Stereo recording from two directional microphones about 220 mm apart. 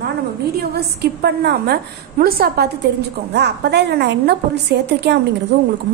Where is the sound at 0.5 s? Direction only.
45° right (ahead or behind).